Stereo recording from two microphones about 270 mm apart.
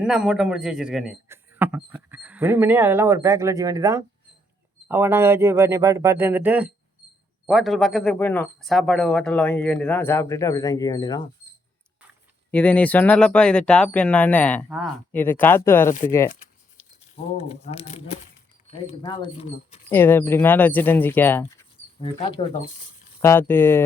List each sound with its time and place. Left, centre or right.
0.0 s a man's voice: centre
12.5 s speech: centre
17.5 s speech: left
19.9 s speech: centre
22.0 s speech: centre
23.2 s speech: centre